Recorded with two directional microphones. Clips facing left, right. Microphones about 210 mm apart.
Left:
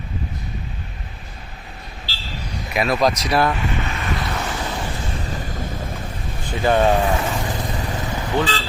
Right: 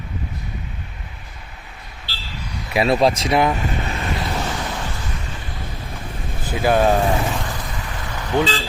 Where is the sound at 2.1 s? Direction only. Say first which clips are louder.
Left 1 dB; 55° right (ahead or behind).